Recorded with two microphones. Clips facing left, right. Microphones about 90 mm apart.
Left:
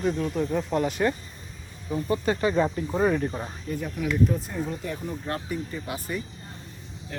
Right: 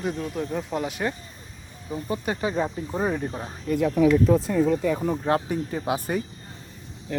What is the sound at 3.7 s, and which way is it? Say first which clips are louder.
Speech: right 10 dB; 90° right.